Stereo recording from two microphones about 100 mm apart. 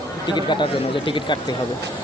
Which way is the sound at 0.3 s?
50° left (ahead or behind).